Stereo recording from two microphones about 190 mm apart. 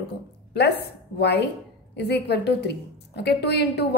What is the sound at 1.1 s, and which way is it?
A woman's voice, 60° left (ahead or behind).